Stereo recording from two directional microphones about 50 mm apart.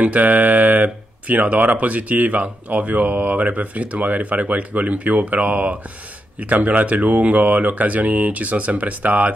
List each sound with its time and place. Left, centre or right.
0.0 s speech: right